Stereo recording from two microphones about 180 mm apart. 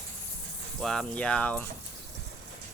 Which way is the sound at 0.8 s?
5° left (ahead or behind).